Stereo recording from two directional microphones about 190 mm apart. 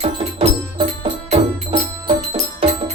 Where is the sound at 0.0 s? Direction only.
30° right (ahead or behind).